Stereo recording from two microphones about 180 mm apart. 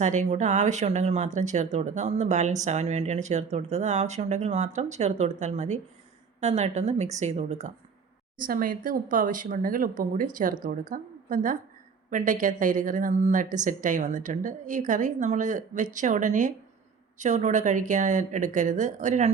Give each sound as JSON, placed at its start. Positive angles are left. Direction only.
{"t": 0.0, "sound": "speech", "side_deg": -40}
{"t": 8.4, "sound": "a woman's voice", "side_deg": -50}